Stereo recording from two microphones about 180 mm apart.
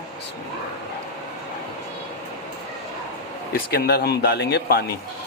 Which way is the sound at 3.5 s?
60° left (ahead or behind).